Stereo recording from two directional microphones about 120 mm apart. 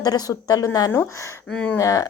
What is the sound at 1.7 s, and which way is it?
Speech, 30° left (ahead or behind).